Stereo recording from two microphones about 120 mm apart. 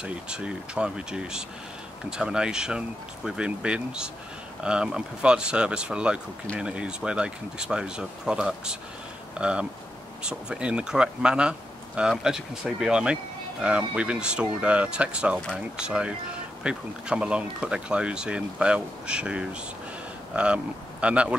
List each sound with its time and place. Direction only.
0.0 s speech: 10° right (ahead or behind)